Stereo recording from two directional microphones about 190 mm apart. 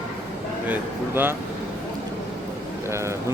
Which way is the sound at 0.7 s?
10° right (ahead or behind).